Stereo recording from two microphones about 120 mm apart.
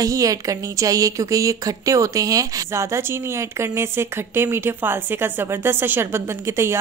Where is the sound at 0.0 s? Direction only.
30° right (ahead or behind).